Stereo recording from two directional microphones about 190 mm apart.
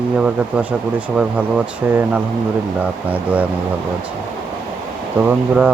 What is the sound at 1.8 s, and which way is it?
Speech, 10° right (ahead or behind).